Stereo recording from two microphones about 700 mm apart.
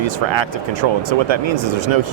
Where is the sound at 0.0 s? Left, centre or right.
Right.